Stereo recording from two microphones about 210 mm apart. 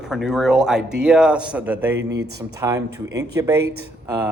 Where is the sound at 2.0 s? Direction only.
55° right (ahead or behind).